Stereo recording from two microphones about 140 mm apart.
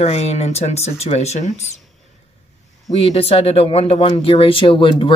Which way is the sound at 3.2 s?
45° left (ahead or behind).